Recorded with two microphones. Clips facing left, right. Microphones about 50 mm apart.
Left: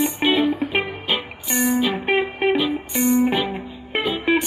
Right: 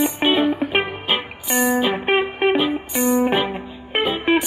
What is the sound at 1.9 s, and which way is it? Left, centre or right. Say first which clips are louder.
Music: right 2 dB; right.